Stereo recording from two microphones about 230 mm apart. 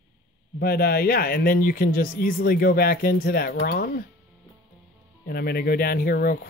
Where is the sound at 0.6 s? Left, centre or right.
Left.